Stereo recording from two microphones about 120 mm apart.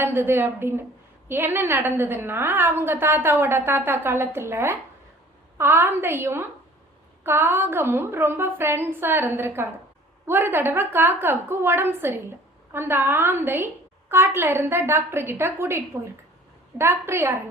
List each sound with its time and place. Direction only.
0.0 s a woman's voice: 20° right (ahead or behind)